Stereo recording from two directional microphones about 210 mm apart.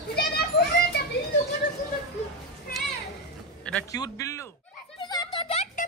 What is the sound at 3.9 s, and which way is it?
Speech, 15° left (ahead or behind).